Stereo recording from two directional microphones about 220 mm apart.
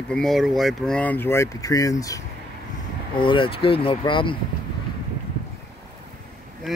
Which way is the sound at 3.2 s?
25° left (ahead or behind).